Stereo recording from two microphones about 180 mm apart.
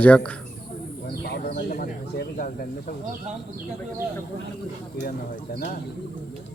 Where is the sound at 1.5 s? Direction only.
50° left (ahead or behind).